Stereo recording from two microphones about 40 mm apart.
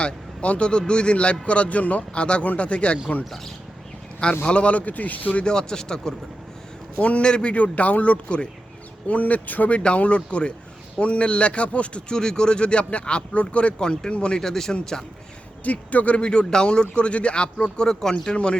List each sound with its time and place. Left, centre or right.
0.0 s speech: left
4.4 s speech: left
5.4 s speech: left
7.0 s speech: left
14.4 s speech: centre
15.6 s speech: left